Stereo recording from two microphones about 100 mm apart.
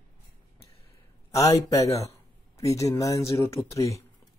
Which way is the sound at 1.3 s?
35° left (ahead or behind).